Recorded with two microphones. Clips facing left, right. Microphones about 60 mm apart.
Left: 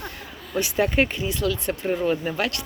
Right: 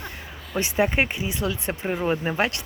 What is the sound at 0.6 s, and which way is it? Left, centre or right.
Speech, right.